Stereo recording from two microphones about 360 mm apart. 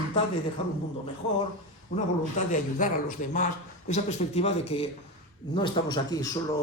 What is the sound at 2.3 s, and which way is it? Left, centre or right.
A man's voice, left.